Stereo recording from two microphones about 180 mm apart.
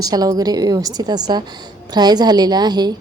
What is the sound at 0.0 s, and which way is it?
A woman's voice, 20° right (ahead or behind).